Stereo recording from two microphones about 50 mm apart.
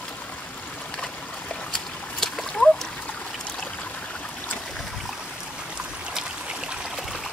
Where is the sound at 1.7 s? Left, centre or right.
Centre.